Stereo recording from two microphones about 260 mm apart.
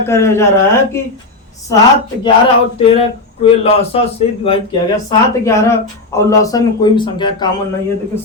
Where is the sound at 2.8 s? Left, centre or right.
Left.